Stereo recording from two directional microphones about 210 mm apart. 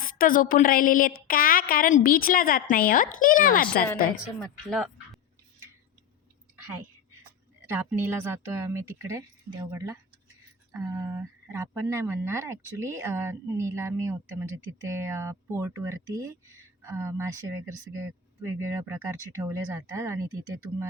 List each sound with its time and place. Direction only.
0.0 s a woman's voice: 40° left (ahead or behind)
4.4 s speech: centre (ahead or behind)
7.7 s speech: 10° right (ahead or behind)